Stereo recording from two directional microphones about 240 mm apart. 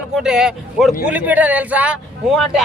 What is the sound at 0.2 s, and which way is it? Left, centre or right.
Speech, centre.